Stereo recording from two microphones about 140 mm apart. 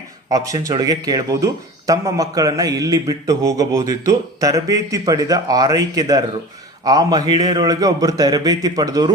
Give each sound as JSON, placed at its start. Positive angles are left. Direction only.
{"t": 0.3, "sound": "a man's voice", "side_deg": -25}